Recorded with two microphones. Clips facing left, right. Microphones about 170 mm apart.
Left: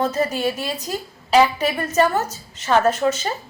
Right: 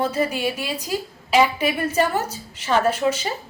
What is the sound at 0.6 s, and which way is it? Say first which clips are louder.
A woman's voice: even; 40° left (ahead or behind).